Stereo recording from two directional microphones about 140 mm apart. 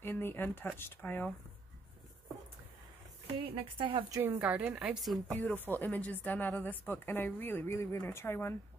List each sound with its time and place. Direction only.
0.0 s a woman's voice: 15° left (ahead or behind)
3.4 s speech: 40° right (ahead or behind)
4.1 s a woman's voice: 15° right (ahead or behind)
5.4 s a woman's voice: 15° left (ahead or behind)